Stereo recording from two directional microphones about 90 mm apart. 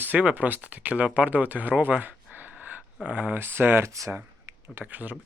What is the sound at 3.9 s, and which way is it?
Speech, 35° right (ahead or behind).